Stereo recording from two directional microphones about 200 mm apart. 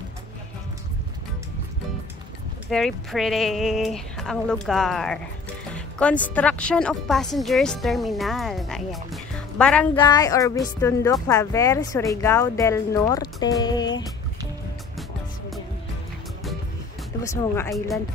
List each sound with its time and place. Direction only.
2.7 s speech: centre (ahead or behind)
9.9 s speech: 20° left (ahead or behind)
17.2 s speech: 15° left (ahead or behind)
17.7 s speech: centre (ahead or behind)